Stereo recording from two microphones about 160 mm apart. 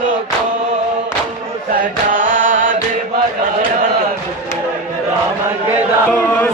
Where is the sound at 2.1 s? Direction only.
55° right (ahead or behind).